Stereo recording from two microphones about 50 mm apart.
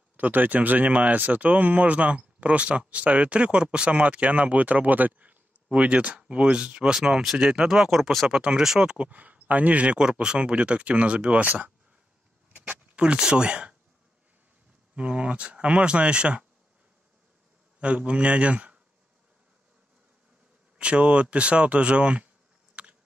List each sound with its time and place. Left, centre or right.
0.2 s speech: right; by 8.4 s centre
8.4 s speech: centre
8.9 s speech: right
12.5 s a sound: right
13.2 s speech: centre
15.0 s speech: right
17.7 s speech: right
20.7 s speech: right
22.8 s a sound: right